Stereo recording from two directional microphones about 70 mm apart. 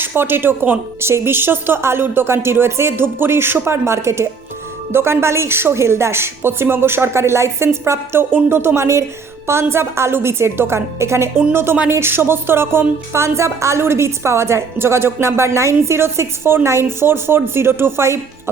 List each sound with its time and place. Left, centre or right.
0.0 s a woman's voice: right